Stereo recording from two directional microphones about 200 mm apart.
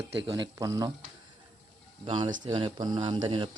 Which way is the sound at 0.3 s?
20° right (ahead or behind).